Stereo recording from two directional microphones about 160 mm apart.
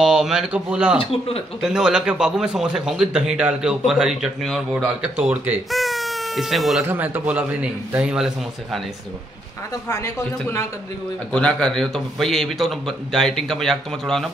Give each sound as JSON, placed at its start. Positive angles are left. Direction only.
{"t": 0.0, "sound": "a man's voice", "side_deg": -5}
{"t": 5.7, "sound": "baby cry", "side_deg": 0}
{"t": 6.8, "sound": "a man's voice", "side_deg": -10}
{"t": 9.8, "sound": "a man's voice", "side_deg": 15}
{"t": 11.3, "sound": "a man's voice", "side_deg": 5}